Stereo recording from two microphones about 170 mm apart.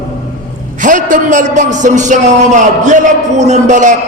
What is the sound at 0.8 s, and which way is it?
A man's voice, 50° right (ahead or behind).